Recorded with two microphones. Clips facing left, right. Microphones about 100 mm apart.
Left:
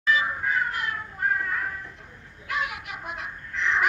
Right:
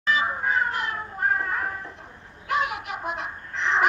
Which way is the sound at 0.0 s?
30° right (ahead or behind).